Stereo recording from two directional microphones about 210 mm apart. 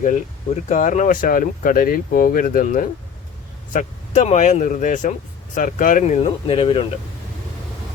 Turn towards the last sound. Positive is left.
turn(degrees=25)  # may be behind; listen again after turning